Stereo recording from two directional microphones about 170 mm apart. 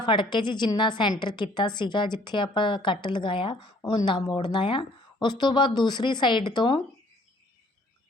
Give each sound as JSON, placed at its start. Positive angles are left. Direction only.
{"t": 0.0, "sound": "a woman's voice", "side_deg": 30}